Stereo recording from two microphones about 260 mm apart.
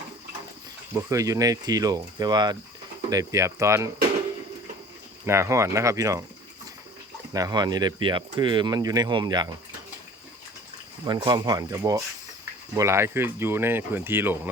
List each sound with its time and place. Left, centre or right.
0.9 s speech: centre
5.2 s speech: centre
7.3 s speech: centre
11.0 s speech: centre